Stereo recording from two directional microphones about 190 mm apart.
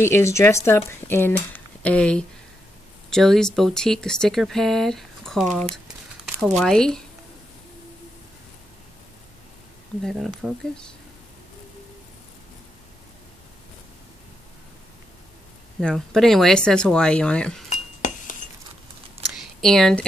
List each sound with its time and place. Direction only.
0.0 s speech: 15° left (ahead or behind)
10.0 s speech: centre (ahead or behind)
15.8 s speech: 5° left (ahead or behind)
17.6 s cutlery: 40° left (ahead or behind)
19.6 s speech: 5° left (ahead or behind)